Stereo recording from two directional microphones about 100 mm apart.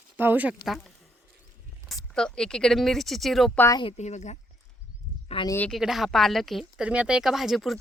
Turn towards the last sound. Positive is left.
turn(degrees=0)  # may be behind; listen again after turning